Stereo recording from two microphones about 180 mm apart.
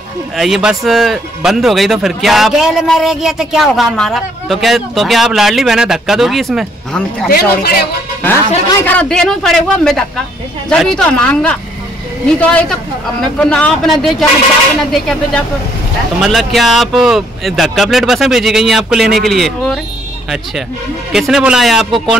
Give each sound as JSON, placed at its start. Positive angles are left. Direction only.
{"t": 0.4, "sound": "speech", "side_deg": -5}
{"t": 7.2, "sound": "speech", "side_deg": 60}
{"t": 8.2, "sound": "speech", "side_deg": 10}
{"t": 21.1, "sound": "speech", "side_deg": -5}